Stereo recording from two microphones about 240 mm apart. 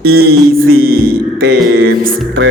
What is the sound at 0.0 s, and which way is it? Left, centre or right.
Music, right.